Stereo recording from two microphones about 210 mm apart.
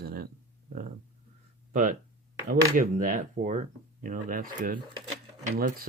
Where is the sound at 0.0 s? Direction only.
45° right (ahead or behind).